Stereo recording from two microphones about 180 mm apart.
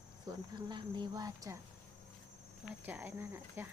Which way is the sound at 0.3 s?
25° right (ahead or behind).